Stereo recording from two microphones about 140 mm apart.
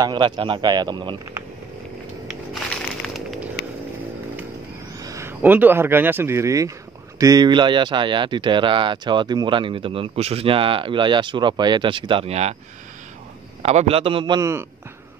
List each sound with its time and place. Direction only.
0.0 s speech: 35° right (ahead or behind)
2.2 s a sound: 5° left (ahead or behind)
5.0 s a sound: 20° right (ahead or behind)
5.4 s speech: 15° right (ahead or behind); by 12.5 s 50° right (ahead or behind)
13.6 s a man's voice: 50° right (ahead or behind)
14.4 s speech: 20° right (ahead or behind)